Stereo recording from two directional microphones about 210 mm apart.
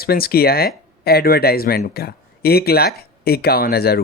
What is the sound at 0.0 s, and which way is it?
Speech, 45° left (ahead or behind).